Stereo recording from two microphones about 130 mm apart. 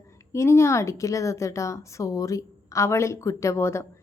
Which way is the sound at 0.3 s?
20° left (ahead or behind).